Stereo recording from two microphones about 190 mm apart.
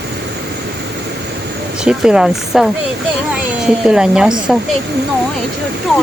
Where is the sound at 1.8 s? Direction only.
5° right (ahead or behind).